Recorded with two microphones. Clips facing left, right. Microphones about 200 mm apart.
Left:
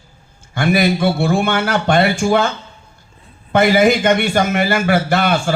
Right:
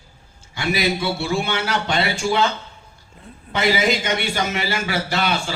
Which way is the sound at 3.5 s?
55° left (ahead or behind).